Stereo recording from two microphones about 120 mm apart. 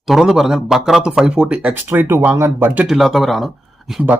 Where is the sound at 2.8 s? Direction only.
Centre (ahead or behind).